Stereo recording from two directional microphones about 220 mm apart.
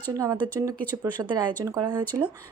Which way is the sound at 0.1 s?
15° right (ahead or behind).